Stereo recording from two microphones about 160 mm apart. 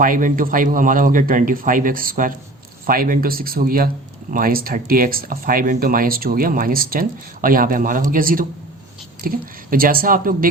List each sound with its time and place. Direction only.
0.0 s speech: 55° right (ahead or behind)